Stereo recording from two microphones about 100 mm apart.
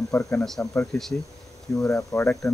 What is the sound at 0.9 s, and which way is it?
Speech, 5° left (ahead or behind).